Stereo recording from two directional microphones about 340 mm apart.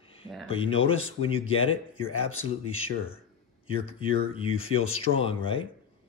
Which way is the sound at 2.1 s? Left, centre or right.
Left.